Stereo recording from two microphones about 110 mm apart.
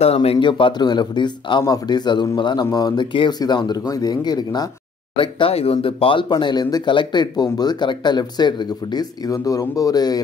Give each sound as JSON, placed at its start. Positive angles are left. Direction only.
{"t": 0.0, "sound": "speech", "side_deg": 65}
{"t": 0.4, "sound": "speech", "side_deg": 50}
{"t": 5.1, "sound": "speech", "side_deg": 55}